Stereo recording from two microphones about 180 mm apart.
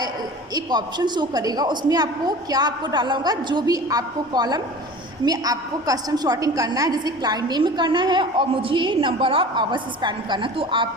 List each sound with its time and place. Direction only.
0.5 s a woman's voice: 25° right (ahead or behind)